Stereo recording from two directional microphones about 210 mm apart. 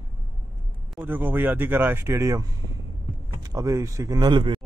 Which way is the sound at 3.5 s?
15° right (ahead or behind).